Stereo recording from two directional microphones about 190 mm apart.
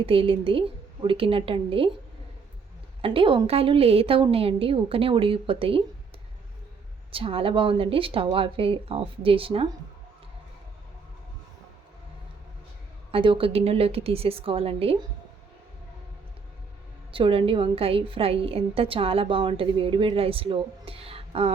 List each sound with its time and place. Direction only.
0.0 s a woman's voice: 30° right (ahead or behind)
3.0 s a woman's voice: 30° right (ahead or behind)
7.1 s a woman's voice: 30° right (ahead or behind)
13.1 s a woman's voice: 30° right (ahead or behind)
17.1 s a woman's voice: 30° right (ahead or behind)